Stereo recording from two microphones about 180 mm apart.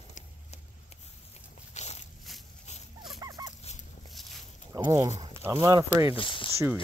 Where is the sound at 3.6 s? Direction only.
40° left (ahead or behind).